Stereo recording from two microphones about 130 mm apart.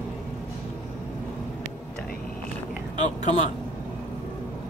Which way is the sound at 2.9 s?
65° left (ahead or behind).